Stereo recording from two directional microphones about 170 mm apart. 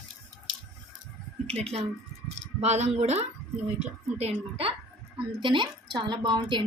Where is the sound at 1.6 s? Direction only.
40° right (ahead or behind).